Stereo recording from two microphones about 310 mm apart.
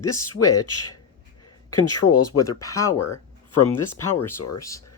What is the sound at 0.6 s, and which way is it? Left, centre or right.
Speech, left.